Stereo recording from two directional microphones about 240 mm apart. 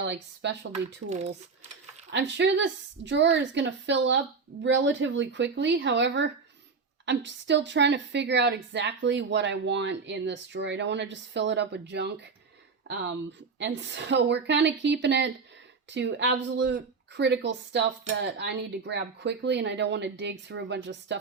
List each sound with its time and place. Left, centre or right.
0.0 s a woman's voice: right
2.0 s a woman's voice: right
13.6 s a woman's voice: right